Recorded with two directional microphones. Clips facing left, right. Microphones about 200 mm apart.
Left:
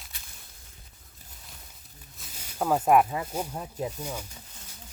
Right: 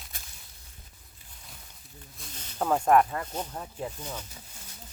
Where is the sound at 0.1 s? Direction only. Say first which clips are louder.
Right 4 dB; 45° right (ahead or behind).